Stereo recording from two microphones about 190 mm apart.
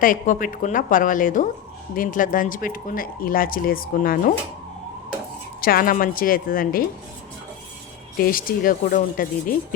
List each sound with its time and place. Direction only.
0.0 s speech: 45° left (ahead or behind)
5.5 s speech: 50° left (ahead or behind)
8.2 s speech: 50° left (ahead or behind)